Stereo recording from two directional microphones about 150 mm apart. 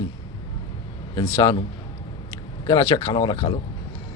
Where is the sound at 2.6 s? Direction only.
25° left (ahead or behind).